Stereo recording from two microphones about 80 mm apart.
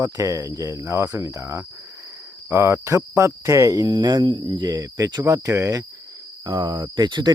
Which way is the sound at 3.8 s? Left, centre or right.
Right.